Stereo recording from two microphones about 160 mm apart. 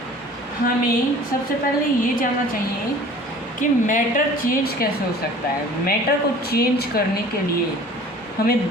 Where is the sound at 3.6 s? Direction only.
55° left (ahead or behind).